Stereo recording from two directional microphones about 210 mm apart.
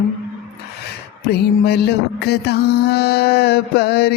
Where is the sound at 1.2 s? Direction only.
50° left (ahead or behind).